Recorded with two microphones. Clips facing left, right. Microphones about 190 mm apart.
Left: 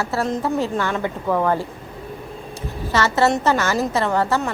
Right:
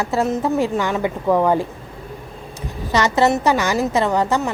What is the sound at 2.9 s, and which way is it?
A woman's voice, 15° right (ahead or behind).